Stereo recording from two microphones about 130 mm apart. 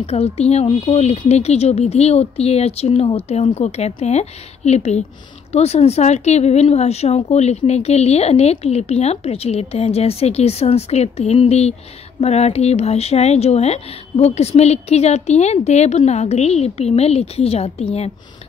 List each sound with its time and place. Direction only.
0.0 s a woman's voice: 50° left (ahead or behind)